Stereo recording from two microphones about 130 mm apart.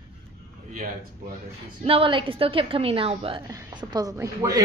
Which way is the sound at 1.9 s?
45° right (ahead or behind).